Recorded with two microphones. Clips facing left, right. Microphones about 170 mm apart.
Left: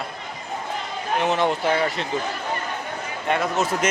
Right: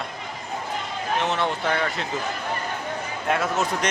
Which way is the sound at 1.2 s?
10° left (ahead or behind).